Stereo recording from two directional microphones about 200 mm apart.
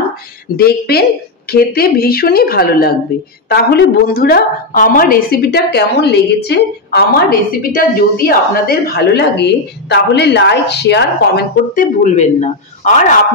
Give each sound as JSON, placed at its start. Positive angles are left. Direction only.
{"t": 0.6, "sound": "a woman's voice", "side_deg": 50}